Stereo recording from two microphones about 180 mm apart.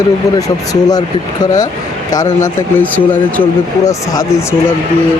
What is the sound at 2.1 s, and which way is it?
Speech, 15° left (ahead or behind).